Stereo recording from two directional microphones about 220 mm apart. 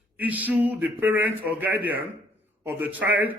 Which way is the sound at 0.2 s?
5° right (ahead or behind).